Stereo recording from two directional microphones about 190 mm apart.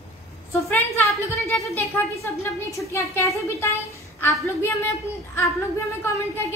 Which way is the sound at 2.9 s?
15° left (ahead or behind).